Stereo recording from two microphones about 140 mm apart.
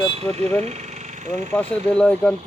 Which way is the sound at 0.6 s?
50° right (ahead or behind).